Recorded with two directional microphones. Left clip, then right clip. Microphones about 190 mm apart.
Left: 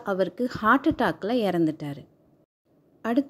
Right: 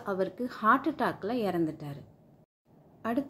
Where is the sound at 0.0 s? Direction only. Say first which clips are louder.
Left 6 dB; 35° left (ahead or behind).